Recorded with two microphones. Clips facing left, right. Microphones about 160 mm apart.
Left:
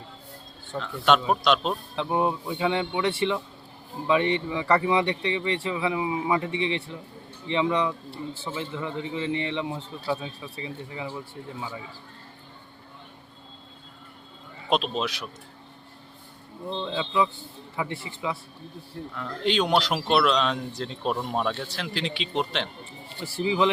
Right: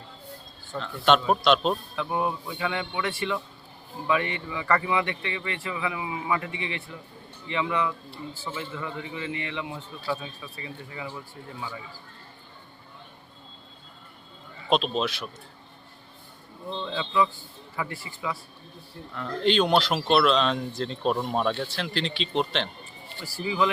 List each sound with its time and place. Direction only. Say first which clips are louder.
0.8 s speech: even; 5° left (ahead or behind)
2.0 s a man's voice: left 3 dB; 25° left (ahead or behind)
14.7 s speech: right 1 dB; 5° left (ahead or behind)
16.6 s a man's voice: left 2 dB; 25° left (ahead or behind)
19.1 s speech: right 2 dB; 5° left (ahead or behind)
23.2 s a man's voice: left 3 dB; 25° left (ahead or behind)